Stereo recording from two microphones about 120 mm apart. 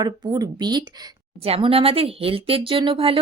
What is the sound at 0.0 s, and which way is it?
Speech, 35° right (ahead or behind).